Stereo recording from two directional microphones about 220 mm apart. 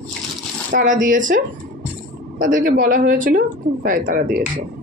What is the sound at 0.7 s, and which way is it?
Speech, 40° right (ahead or behind).